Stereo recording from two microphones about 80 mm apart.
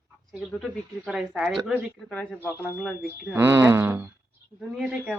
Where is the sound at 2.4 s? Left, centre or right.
Left.